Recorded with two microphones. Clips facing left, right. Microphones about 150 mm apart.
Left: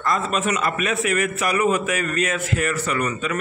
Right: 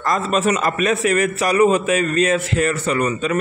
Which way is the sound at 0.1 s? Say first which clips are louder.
Right 5 dB; 40° right (ahead or behind).